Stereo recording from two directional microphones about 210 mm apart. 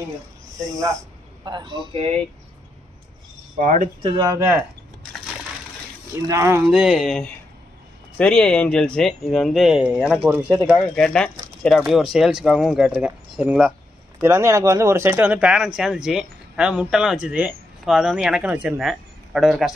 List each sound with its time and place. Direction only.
1.4 s speech: 20° right (ahead or behind)
3.5 s speech: 35° right (ahead or behind)
4.0 s speech: 15° right (ahead or behind)
6.2 s speech: 15° right (ahead or behind)
10.8 s speech: 5° left (ahead or behind)